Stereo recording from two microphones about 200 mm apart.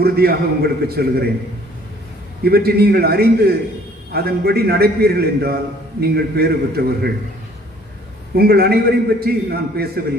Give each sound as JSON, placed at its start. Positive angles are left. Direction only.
{"t": 0.0, "sound": "a man's voice", "side_deg": -50}
{"t": 2.4, "sound": "a man's voice", "side_deg": -50}
{"t": 8.4, "sound": "a man's voice", "side_deg": -50}